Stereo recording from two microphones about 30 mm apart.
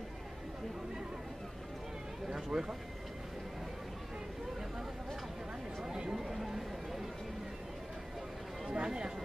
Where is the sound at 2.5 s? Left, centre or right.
Centre.